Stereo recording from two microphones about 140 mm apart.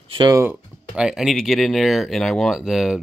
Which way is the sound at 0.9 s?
5° right (ahead or behind).